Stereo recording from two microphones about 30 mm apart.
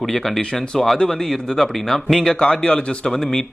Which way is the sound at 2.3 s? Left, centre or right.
Left.